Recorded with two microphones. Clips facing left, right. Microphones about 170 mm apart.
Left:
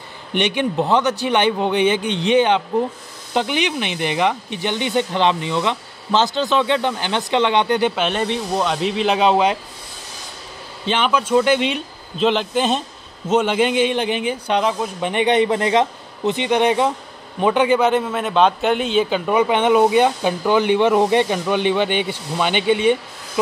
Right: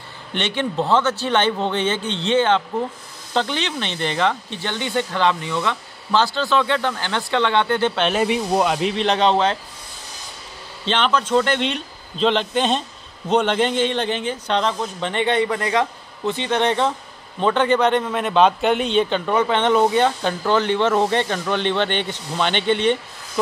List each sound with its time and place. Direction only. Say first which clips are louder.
0.3 s a man's voice: left 4 dB; 15° left (ahead or behind)
7.9 s speech: right 1 dB; 5° left (ahead or behind)
8.2 s speech: right 2 dB; 10° right (ahead or behind); by 9.6 s 10° left (ahead or behind)
10.9 s a man's voice: left 1 dB; 10° left (ahead or behind)